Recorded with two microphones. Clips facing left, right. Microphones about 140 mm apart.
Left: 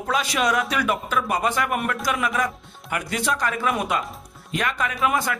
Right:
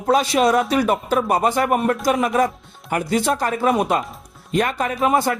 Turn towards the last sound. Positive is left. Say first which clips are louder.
# right 5 dB
turn(degrees=-35)  # may be behind; listen again after turning